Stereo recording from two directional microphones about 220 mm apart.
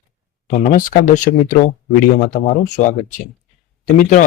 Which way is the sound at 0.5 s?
35° left (ahead or behind).